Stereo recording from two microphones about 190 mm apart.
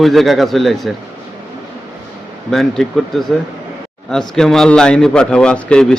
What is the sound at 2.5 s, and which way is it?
Speech, centre (ahead or behind).